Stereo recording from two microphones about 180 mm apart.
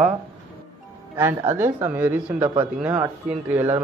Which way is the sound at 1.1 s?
15° right (ahead or behind).